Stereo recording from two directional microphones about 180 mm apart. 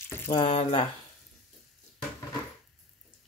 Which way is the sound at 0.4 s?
40° left (ahead or behind).